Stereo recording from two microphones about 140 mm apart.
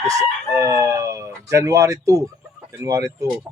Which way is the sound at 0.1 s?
25° right (ahead or behind).